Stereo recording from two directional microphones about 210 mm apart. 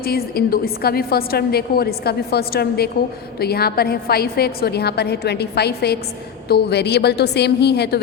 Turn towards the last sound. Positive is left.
turn(degrees=50)  # may be behind; listen again after turning